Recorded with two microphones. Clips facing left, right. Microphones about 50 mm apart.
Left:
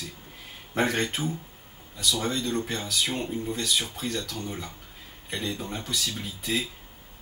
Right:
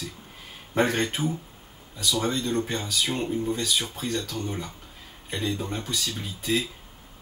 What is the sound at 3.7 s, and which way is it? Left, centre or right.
Speech, centre.